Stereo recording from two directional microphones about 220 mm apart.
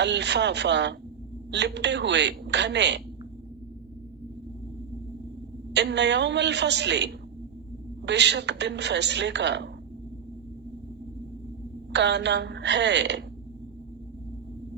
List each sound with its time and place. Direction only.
0.0 s a woman's voice: 50° right (ahead or behind)
5.7 s a woman's voice: 50° right (ahead or behind)
11.9 s a woman's voice: 50° right (ahead or behind)